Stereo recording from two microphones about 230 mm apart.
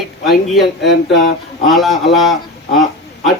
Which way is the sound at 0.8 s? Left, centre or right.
Left.